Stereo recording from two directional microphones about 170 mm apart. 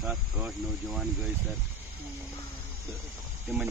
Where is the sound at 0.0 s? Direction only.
10° right (ahead or behind).